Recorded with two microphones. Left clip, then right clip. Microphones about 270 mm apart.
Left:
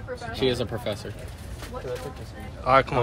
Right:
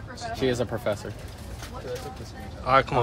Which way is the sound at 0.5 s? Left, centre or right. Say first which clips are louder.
Right 2 dB; centre.